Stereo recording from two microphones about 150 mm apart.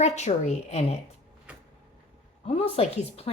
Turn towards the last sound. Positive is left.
turn(degrees=40)  # may be behind; listen again after turning